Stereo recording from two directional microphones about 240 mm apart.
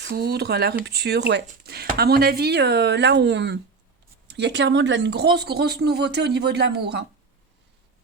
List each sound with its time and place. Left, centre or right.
0.0 s speech: right